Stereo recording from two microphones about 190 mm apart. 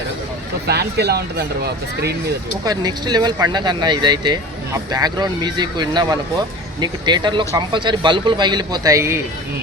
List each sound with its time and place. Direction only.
0.7 s speech: 60° right (ahead or behind)
2.6 s speech: 20° right (ahead or behind)